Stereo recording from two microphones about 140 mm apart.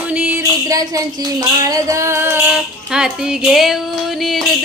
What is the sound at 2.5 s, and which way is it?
Female singing, 5° right (ahead or behind).